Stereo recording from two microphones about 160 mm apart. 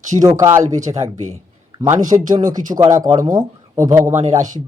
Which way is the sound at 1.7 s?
20° right (ahead or behind).